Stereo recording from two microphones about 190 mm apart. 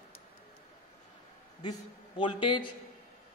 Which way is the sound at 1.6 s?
25° left (ahead or behind).